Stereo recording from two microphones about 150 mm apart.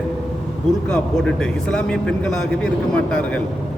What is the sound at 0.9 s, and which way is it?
A man's voice, 5° left (ahead or behind).